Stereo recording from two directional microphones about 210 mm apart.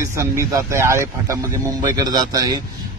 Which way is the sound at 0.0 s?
15° right (ahead or behind).